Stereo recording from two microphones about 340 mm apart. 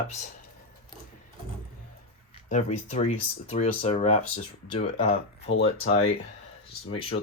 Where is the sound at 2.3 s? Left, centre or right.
Centre.